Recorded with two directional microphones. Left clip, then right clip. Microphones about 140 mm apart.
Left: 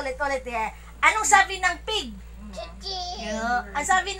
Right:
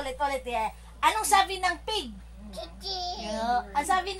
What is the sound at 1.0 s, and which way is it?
A woman's voice, 65° right (ahead or behind).